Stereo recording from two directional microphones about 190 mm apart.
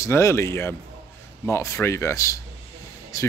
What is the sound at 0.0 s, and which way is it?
A man's voice, 15° left (ahead or behind).